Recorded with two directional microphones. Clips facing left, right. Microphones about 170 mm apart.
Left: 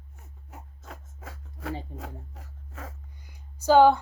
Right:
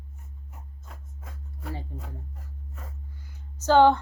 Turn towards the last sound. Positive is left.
turn(degrees=10)  # may be behind; listen again after turning